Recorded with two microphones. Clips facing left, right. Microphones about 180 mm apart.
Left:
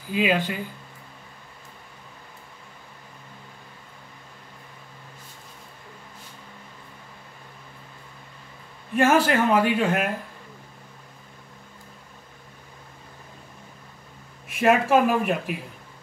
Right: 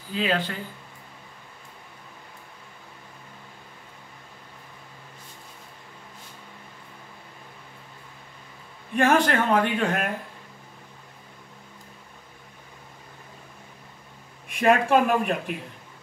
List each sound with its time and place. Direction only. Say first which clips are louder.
0.1 s speech: left 3 dB; 10° left (ahead or behind)
8.9 s speech: left 1 dB; 5° left (ahead or behind)
14.5 s speech: left 1 dB; centre (ahead or behind)